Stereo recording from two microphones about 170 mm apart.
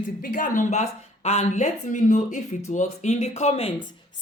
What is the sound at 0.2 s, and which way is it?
Speech, 50° left (ahead or behind).